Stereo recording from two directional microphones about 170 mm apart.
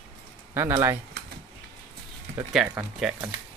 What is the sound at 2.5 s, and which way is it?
Speech, 5° right (ahead or behind).